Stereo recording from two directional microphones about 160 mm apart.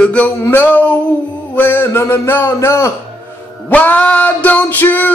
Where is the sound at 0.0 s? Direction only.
10° left (ahead or behind).